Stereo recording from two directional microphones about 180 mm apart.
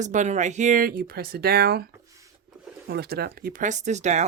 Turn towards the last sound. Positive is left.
turn(degrees=-40)  # may be behind; listen again after turning